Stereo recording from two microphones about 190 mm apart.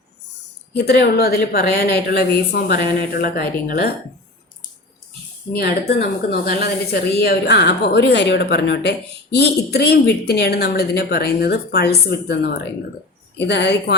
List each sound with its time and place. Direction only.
0.9 s speech: 55° left (ahead or behind)
5.5 s speech: 55° left (ahead or behind)